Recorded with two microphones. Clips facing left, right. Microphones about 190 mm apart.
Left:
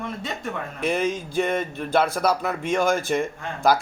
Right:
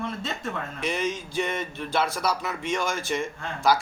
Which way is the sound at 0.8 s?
55° left (ahead or behind).